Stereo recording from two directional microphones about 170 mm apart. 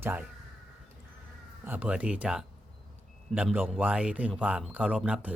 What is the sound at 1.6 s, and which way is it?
Speech, 10° right (ahead or behind).